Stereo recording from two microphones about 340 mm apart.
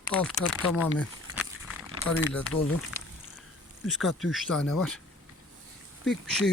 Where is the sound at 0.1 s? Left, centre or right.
Centre.